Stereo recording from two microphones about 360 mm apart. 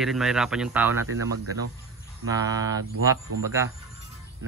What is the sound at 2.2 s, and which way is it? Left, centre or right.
Speech, centre.